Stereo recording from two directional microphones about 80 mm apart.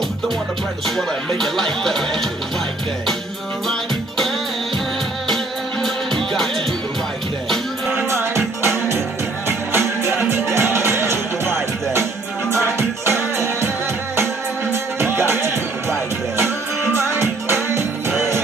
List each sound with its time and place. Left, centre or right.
0.8 s speech: centre
8.6 s music: right
12.7 s music: right
14.7 s music: right